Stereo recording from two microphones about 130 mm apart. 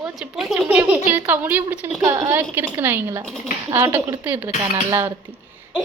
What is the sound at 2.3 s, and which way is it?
A woman's voice, 15° right (ahead or behind).